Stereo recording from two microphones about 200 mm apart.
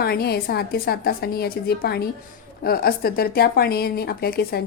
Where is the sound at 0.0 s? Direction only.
55° left (ahead or behind).